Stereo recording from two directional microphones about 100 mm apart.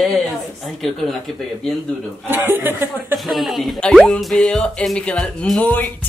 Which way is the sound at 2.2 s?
20° right (ahead or behind).